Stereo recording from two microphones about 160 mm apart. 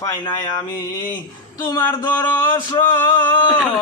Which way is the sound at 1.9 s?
10° left (ahead or behind).